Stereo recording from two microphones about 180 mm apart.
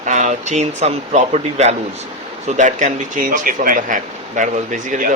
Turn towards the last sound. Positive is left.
turn(degrees=-45)  # may be behind; listen again after turning